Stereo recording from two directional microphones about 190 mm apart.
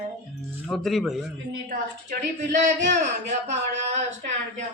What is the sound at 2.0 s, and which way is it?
Speech, 40° right (ahead or behind).